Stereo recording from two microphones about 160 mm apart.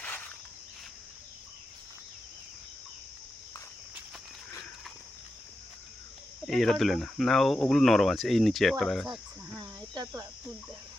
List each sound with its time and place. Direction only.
0.0 s a sound: 10° left (ahead or behind)
6.4 s speech: centre (ahead or behind)
9.6 s cricket: 25° right (ahead or behind)